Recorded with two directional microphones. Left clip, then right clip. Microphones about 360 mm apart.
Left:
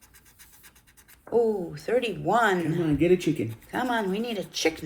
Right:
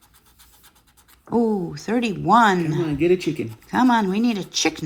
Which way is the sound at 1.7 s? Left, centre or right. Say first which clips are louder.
Right 1 dB; centre.